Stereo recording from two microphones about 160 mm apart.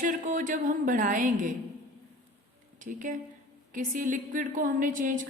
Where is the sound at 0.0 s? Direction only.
55° right (ahead or behind).